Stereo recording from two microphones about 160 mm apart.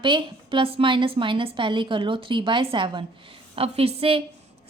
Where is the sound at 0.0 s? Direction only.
30° right (ahead or behind).